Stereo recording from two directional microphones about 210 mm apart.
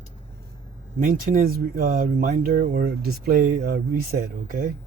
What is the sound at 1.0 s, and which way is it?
Speech, 40° right (ahead or behind).